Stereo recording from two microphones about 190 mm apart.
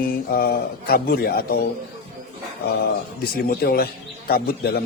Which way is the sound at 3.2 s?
55° left (ahead or behind).